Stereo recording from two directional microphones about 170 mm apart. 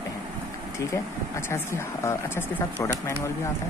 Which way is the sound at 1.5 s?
15° left (ahead or behind).